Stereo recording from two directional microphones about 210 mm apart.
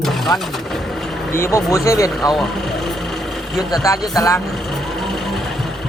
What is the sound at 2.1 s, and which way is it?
Vehicle, centre (ahead or behind).